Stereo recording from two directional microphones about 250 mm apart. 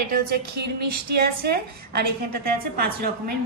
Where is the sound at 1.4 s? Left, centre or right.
Right.